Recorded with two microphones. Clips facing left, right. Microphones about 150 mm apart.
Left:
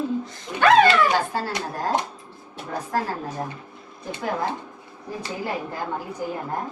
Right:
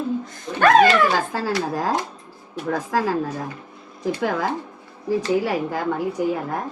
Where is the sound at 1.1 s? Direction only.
90° right.